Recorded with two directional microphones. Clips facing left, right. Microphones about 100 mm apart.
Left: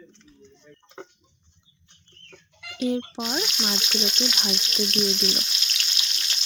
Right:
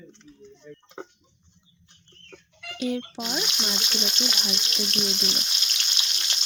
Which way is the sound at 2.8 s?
25° left (ahead or behind).